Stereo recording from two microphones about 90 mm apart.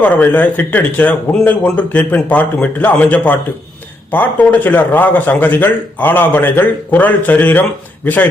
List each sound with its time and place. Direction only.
0.0 s a man's voice: 20° left (ahead or behind)